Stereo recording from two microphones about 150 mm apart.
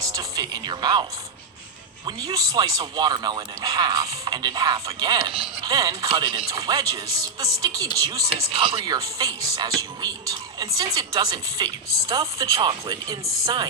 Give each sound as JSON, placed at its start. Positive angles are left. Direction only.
{"t": 0.0, "sound": "speech", "side_deg": -25}
{"t": 2.0, "sound": "speech", "side_deg": -25}
{"t": 8.3, "sound": "speech", "side_deg": -40}